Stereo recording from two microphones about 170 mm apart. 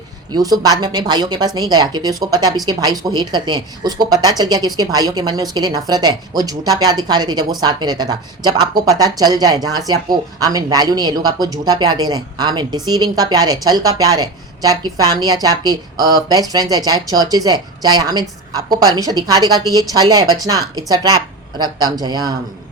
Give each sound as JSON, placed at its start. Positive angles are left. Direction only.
{"t": 0.3, "sound": "speech", "side_deg": -20}